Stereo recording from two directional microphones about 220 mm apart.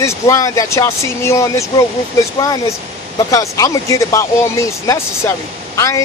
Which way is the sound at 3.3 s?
15° left (ahead or behind).